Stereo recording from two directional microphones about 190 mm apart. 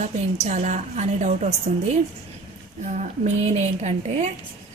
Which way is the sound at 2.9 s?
40° right (ahead or behind).